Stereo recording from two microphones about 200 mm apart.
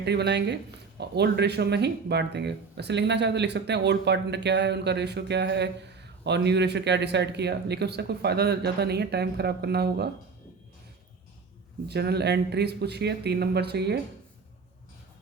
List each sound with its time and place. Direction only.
0.0 s speech: 55° right (ahead or behind)
11.9 s speech: 55° right (ahead or behind)